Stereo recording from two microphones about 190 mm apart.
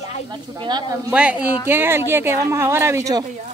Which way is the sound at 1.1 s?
5° right (ahead or behind).